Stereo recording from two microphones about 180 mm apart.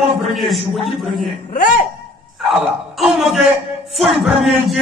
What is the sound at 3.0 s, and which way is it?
Music, centre (ahead or behind).